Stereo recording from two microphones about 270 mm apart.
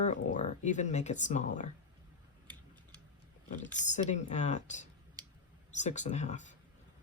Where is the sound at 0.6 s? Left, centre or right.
Left.